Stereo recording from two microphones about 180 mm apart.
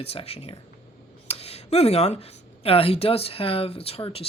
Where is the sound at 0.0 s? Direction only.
35° left (ahead or behind).